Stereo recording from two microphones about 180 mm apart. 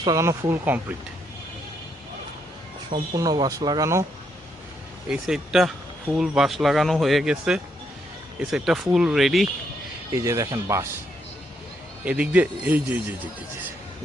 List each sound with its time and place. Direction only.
0.0 s speech: 20° right (ahead or behind)
2.9 s speech: 25° right (ahead or behind)
5.0 s speech: 5° right (ahead or behind)
10.1 s speech: 15° right (ahead or behind)
12.0 s speech: 5° right (ahead or behind)